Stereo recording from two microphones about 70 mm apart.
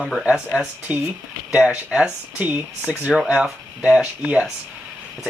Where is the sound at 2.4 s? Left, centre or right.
Right.